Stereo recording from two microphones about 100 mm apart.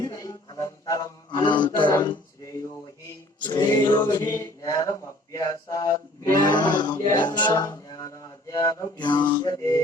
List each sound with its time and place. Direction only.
0.0 s music: 35° left (ahead or behind)
1.3 s a sound: 50° left (ahead or behind)
2.4 s a sound: 30° left (ahead or behind)
3.4 s a capella: 50° left (ahead or behind)
4.4 s mantra: 30° left (ahead or behind)
6.4 s music: 45° left (ahead or behind)
7.5 s music: 35° left (ahead or behind)
9.0 s mantra: 50° left (ahead or behind)
9.5 s music: 35° left (ahead or behind)